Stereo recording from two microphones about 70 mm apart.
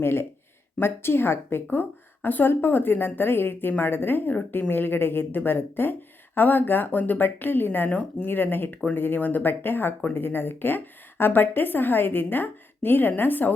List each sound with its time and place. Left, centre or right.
0.0 s speech: left
7.9 s speech: centre
8.3 s speech: left